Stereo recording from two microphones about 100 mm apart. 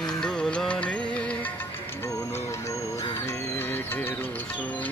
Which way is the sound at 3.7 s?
20° left (ahead or behind).